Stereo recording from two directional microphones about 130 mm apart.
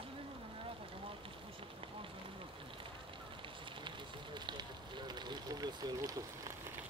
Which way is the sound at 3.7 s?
40° right (ahead or behind).